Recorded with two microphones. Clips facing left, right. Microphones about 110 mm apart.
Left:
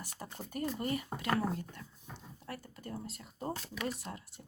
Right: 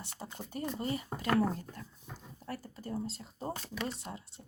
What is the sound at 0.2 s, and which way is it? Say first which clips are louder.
Speech: left 1 dB; 20° right (ahead or behind).